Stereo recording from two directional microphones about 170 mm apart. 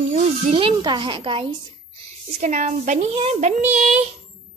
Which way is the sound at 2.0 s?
40° right (ahead or behind).